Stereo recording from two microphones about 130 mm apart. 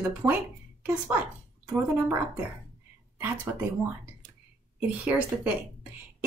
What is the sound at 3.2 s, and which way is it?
Speech, 15° right (ahead or behind).